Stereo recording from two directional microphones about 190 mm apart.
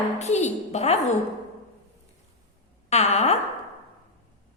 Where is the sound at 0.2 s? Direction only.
35° left (ahead or behind).